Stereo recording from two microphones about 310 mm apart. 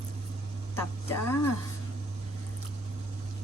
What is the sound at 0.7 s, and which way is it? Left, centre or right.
Speech, centre.